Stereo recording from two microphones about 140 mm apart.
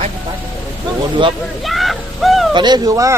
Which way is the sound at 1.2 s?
35° right (ahead or behind).